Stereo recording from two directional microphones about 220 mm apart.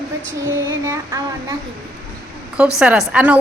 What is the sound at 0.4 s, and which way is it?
Child singing, 15° right (ahead or behind).